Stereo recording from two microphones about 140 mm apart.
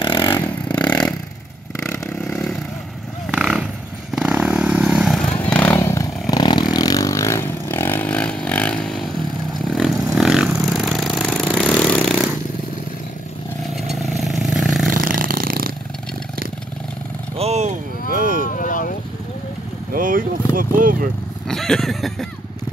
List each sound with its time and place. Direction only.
0.0 s vehicle: 35° left (ahead or behind)
0.8 s vehicle: 5° left (ahead or behind)
2.2 s vehicle: 5° left (ahead or behind)
5.8 s vehicle: 20° left (ahead or behind); by 9.9 s centre (ahead or behind)
10.1 s a sound: centre (ahead or behind)
13.9 s vehicle: centre (ahead or behind)
14.9 s a sound: 75° right (ahead or behind)
17.4 s vehicle: 50° right (ahead or behind)
18.1 s vehicle: 85° right
18.6 s vehicle: 75° left (ahead or behind)
19.9 s vehicle: 75° right (ahead or behind)
20.5 s a sound: 85° right
21.5 s a sound: 5° left (ahead or behind)